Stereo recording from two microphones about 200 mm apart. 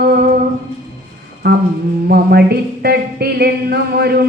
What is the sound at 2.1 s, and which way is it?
Speech, 50° right (ahead or behind).